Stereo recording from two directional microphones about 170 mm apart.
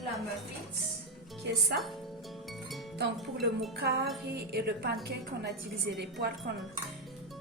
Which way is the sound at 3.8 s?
70° right (ahead or behind).